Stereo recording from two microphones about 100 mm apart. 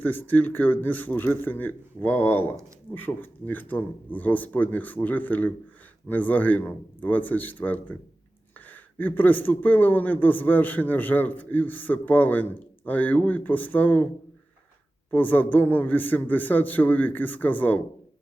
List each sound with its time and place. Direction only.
0.0 s speech: 20° left (ahead or behind)
15.1 s speech: 15° left (ahead or behind)